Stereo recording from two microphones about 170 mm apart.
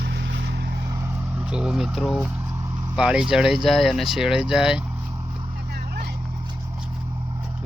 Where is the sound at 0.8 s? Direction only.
20° right (ahead or behind).